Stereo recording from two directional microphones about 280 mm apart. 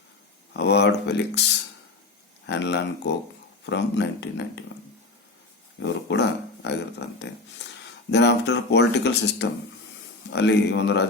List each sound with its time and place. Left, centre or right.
0.5 s speech: left
2.5 s speech: left
5.8 s speech: left